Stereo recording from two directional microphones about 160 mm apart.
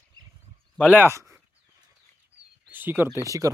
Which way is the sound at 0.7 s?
5° left (ahead or behind).